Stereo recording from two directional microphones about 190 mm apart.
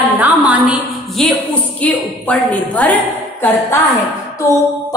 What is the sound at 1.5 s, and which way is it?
A woman's voice, 5° left (ahead or behind).